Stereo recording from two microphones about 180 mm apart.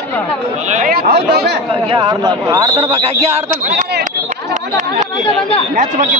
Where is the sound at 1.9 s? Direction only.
25° right (ahead or behind).